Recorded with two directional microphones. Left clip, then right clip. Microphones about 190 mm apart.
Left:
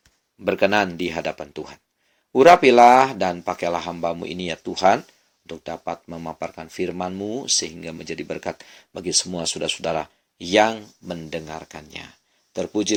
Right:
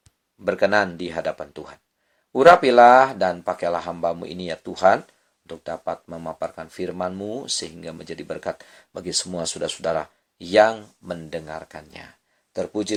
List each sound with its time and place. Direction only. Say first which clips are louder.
0.4 s speech: even; 30° left (ahead or behind)